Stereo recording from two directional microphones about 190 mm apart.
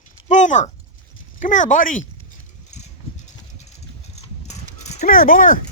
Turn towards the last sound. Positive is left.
turn(degrees=45)  # may be behind; listen again after turning